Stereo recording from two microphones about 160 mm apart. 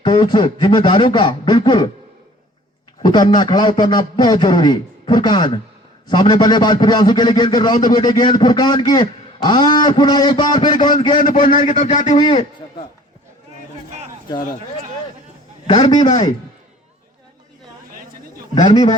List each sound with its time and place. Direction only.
0.0 s a man's voice: 30° left (ahead or behind)
3.0 s a man's voice: 30° left (ahead or behind)
11.2 s a man's voice: 55° left (ahead or behind)
12.1 s a man's voice: 30° left (ahead or behind)
15.6 s a man's voice: 25° left (ahead or behind)
18.5 s a man's voice: 25° left (ahead or behind)